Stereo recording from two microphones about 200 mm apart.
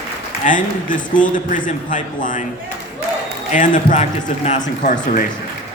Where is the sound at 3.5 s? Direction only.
40° left (ahead or behind).